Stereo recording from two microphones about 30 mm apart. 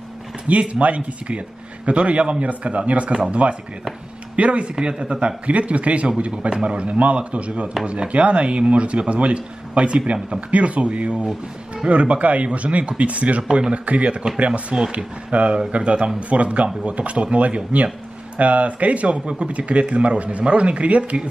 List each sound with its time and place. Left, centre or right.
0.5 s speech: right
4.7 s speech: right
5.2 s speech: right
6.6 s speech: right
12.4 s speech: right
13.5 s speech: right
13.8 s speech: right